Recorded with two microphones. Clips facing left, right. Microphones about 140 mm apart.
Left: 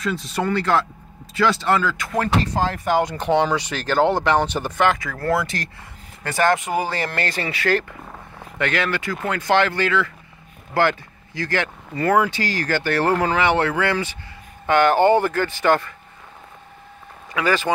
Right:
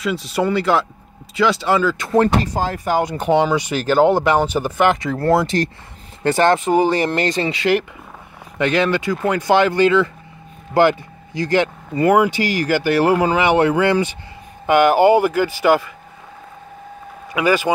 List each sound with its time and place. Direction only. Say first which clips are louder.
0.0 s speech: right 4 dB; 5° right (ahead or behind)
2.0 s speech: right 8 dB; 25° right (ahead or behind)
2.5 s speech: right 1 dB; 10° right (ahead or behind)
5.1 s speech: right 6 dB; 30° right (ahead or behind); by 15.9 s 10° right (ahead or behind)
17.3 s speech: right 4 dB; 10° right (ahead or behind)